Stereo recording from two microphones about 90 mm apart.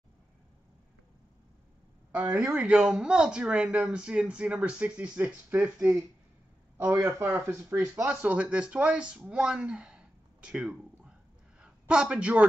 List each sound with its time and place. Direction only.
2.5 s speech: 10° right (ahead or behind)
6.9 s speech: 30° right (ahead or behind)
8.1 s speech: 15° right (ahead or behind)